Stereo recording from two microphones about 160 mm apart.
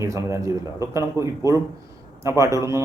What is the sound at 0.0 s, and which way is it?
A man's voice, 20° right (ahead or behind).